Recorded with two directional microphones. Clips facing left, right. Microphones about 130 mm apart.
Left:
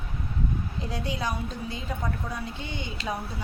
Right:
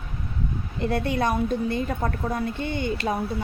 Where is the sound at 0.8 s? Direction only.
60° right (ahead or behind).